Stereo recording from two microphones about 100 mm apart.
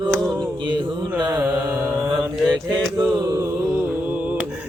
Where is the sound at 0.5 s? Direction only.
50° right (ahead or behind).